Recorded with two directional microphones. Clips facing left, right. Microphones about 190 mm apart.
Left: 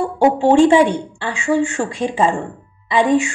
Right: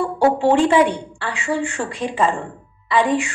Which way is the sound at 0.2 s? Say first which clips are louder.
Left 4 dB; 15° left (ahead or behind).